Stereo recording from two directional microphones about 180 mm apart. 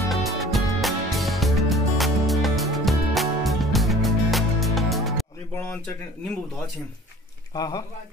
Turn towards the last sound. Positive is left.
turn(degrees=20)  # may be behind; listen again after turning